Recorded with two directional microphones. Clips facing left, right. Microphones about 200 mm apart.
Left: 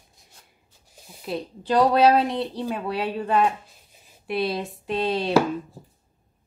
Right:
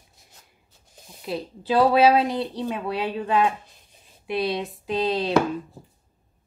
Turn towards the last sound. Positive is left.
turn(degrees=0)  # may be behind; listen again after turning